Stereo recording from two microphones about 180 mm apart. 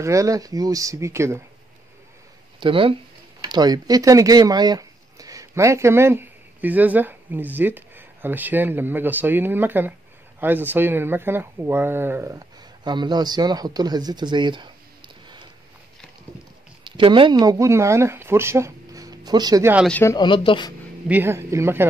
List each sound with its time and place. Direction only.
0.0 s speech: 15° right (ahead or behind)
2.6 s speech: 30° right (ahead or behind)
16.8 s speech: 25° right (ahead or behind)
19.9 s speech: 10° left (ahead or behind)
20.2 s speech: 30° left (ahead or behind)
21.1 s speech: 15° right (ahead or behind)